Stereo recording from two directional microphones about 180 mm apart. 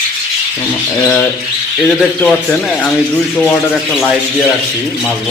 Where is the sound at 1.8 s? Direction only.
5° left (ahead or behind).